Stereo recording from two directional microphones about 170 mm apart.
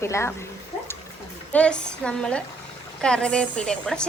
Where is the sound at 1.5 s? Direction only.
5° left (ahead or behind).